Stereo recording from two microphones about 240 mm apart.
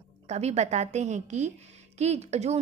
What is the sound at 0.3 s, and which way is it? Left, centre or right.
A woman's voice, right.